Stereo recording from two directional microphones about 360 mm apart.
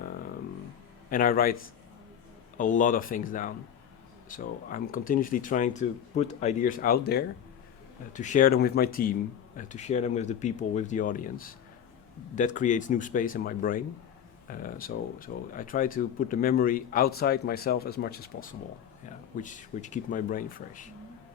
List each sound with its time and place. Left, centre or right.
1.1 s speech: left